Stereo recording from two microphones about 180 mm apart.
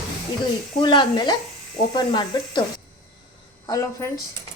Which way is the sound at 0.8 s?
25° left (ahead or behind).